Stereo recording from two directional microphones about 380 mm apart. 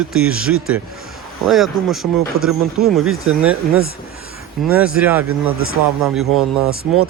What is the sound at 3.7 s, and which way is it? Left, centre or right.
Speech, right.